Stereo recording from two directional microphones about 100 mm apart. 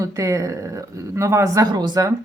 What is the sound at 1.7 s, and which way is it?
Speech, 45° right (ahead or behind).